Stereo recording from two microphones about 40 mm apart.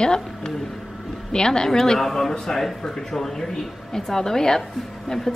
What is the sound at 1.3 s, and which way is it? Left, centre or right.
Speech, centre.